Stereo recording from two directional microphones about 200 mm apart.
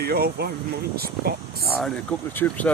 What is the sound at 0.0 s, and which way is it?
Speech, 50° right (ahead or behind).